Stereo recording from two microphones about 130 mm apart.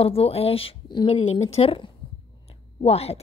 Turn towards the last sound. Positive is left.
turn(degrees=50)  # may be behind; listen again after turning